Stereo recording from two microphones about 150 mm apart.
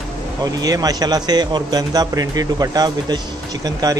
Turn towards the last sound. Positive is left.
turn(degrees=-25)  # may be behind; listen again after turning